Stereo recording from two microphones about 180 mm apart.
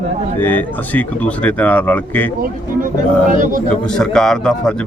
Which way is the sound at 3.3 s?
50° right (ahead or behind).